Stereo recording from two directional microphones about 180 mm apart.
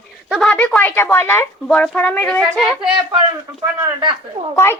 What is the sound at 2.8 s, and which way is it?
Speech, 30° right (ahead or behind).